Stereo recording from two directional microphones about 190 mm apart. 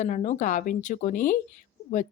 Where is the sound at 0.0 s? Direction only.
40° left (ahead or behind).